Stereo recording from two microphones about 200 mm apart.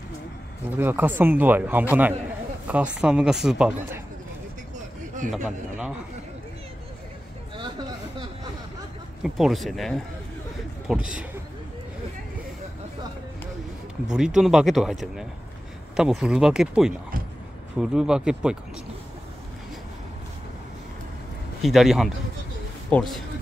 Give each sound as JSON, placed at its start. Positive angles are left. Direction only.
{"t": 0.7, "sound": "a man's voice", "side_deg": -10}
{"t": 5.3, "sound": "speech", "side_deg": -5}
{"t": 7.5, "sound": "a sound", "side_deg": -25}
{"t": 9.2, "sound": "speech", "side_deg": 0}
{"t": 14.1, "sound": "speech", "side_deg": -5}
{"t": 21.6, "sound": "speech", "side_deg": 0}